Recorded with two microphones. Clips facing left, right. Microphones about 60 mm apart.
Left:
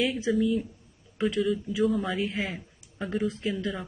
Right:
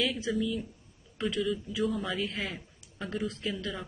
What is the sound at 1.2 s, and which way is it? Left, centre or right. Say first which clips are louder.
A man's voice: left 4 dB; centre.